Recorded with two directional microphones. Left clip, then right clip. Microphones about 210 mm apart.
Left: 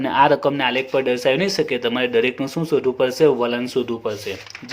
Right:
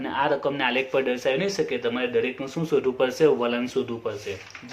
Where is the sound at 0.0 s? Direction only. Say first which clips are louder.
Left 8 dB; 45° left (ahead or behind).